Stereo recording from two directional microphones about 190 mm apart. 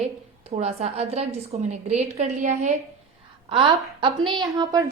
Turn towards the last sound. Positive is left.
turn(degrees=-20)  # may be behind; listen again after turning